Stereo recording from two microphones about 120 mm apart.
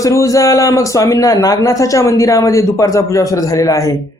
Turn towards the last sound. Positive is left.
turn(degrees=30)  # may be behind; listen again after turning